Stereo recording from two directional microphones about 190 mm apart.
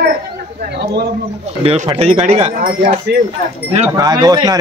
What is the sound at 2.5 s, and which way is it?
Speech, 45° right (ahead or behind).